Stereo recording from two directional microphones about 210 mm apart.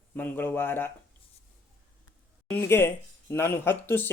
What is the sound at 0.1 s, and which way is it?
Speech, 10° left (ahead or behind).